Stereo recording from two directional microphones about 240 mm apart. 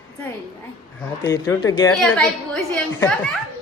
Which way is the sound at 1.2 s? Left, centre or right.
Centre.